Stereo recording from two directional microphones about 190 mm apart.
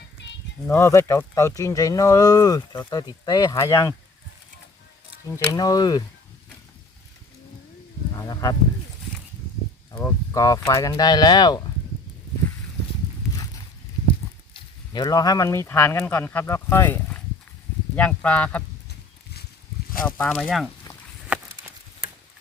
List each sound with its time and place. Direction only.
0.7 s speech: 15° left (ahead or behind)
5.5 s speech: 20° left (ahead or behind)
8.1 s speech: 15° left (ahead or behind)
9.9 s speech: 15° left (ahead or behind)
14.5 s speech: 20° left (ahead or behind)
20.1 s speech: 10° left (ahead or behind)
21.3 s a sound: 5° right (ahead or behind)